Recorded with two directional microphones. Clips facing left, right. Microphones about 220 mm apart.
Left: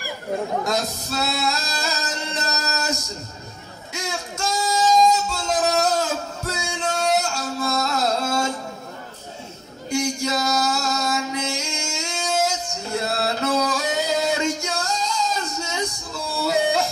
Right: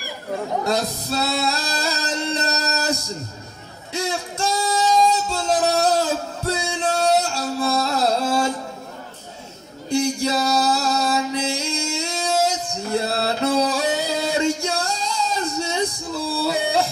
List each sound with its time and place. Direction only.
0.7 s singing: 35° right (ahead or behind)
3.9 s a sound: 35° right (ahead or behind)
9.8 s music: 35° right (ahead or behind)